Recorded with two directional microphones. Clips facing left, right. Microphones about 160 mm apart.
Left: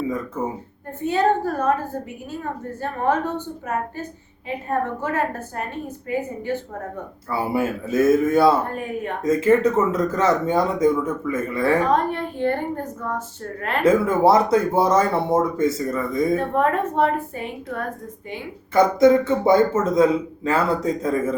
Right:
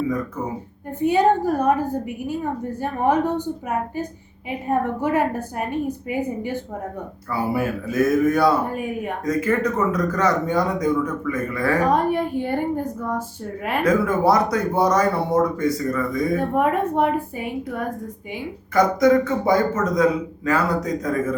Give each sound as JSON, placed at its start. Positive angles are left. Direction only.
{"t": 1.0, "sound": "a woman's voice", "side_deg": -15}
{"t": 7.3, "sound": "a man's voice", "side_deg": 25}
{"t": 8.7, "sound": "a woman's voice", "side_deg": -10}
{"t": 9.2, "sound": "a man's voice", "side_deg": 25}
{"t": 11.9, "sound": "a woman's voice", "side_deg": -10}
{"t": 13.8, "sound": "a man's voice", "side_deg": 25}
{"t": 16.6, "sound": "a woman's voice", "side_deg": -10}
{"t": 18.7, "sound": "a man's voice", "side_deg": 25}